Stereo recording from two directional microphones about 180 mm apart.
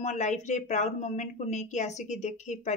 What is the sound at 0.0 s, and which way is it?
Speech, 40° left (ahead or behind).